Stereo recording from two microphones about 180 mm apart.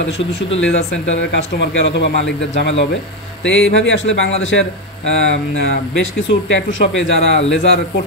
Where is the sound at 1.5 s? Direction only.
75° left (ahead or behind).